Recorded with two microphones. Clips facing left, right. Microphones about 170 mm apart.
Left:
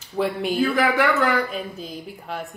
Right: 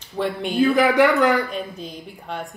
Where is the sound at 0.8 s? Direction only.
20° right (ahead or behind).